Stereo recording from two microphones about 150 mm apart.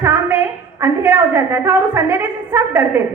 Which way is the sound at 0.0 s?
20° right (ahead or behind).